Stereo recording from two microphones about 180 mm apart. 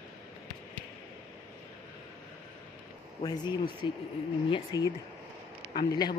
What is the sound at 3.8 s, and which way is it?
Speech, 25° left (ahead or behind).